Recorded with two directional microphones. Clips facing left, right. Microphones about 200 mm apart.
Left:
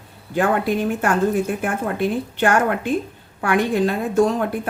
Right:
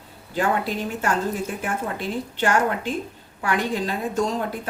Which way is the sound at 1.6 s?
55° left (ahead or behind).